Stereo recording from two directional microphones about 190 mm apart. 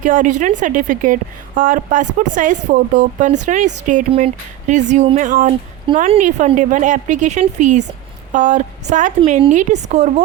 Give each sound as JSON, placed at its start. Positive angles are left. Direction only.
{"t": 0.0, "sound": "a woman's voice", "side_deg": -45}